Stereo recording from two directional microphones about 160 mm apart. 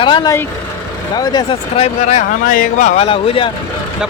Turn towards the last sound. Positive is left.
turn(degrees=35)  # may be behind; listen again after turning